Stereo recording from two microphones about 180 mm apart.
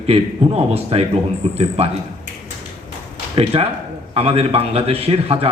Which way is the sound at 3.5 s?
30° right (ahead or behind).